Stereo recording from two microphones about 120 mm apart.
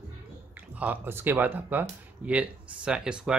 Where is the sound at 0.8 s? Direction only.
15° right (ahead or behind).